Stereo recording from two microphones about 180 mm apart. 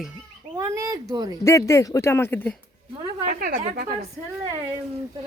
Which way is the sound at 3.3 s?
55° right (ahead or behind).